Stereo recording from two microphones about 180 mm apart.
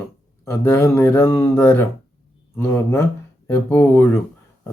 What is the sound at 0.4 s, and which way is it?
Speech, 15° left (ahead or behind).